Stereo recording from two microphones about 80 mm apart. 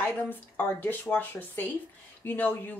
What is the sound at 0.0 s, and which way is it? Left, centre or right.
Speech, left.